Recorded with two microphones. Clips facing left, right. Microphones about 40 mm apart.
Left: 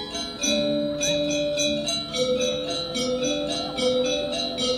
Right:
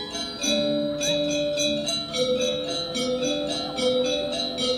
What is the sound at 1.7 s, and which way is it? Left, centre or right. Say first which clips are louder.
Music: even; right.